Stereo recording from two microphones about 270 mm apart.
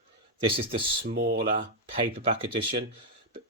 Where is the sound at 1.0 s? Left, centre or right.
Right.